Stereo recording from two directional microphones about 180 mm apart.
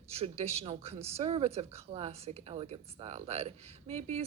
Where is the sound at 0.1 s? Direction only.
35° right (ahead or behind).